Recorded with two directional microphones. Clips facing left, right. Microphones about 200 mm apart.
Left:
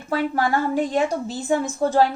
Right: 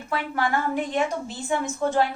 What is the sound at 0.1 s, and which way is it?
A woman's voice, 40° left (ahead or behind).